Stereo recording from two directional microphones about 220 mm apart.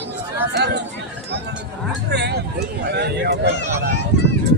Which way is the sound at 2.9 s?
50° right (ahead or behind).